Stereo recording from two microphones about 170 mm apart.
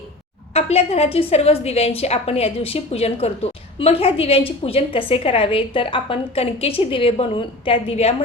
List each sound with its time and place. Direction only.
0.5 s a woman's voice: 35° left (ahead or behind)